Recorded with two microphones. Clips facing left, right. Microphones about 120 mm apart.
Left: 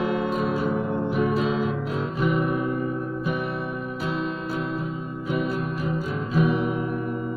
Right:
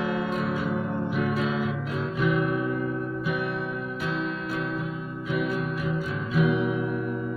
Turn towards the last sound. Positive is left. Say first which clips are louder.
# left 1 dB
turn(degrees=35)  # may be behind; listen again after turning